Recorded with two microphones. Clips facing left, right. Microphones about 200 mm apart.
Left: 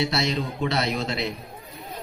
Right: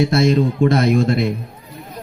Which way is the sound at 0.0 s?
50° right (ahead or behind).